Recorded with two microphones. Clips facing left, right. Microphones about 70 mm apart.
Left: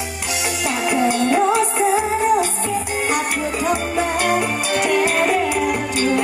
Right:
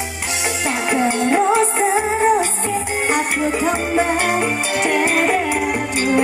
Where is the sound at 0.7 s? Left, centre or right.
Right.